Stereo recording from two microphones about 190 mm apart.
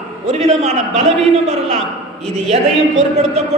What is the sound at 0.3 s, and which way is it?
A man's voice, 35° right (ahead or behind).